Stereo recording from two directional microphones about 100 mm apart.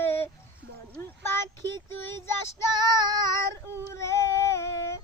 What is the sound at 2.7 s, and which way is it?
Child singing, 45° right (ahead or behind).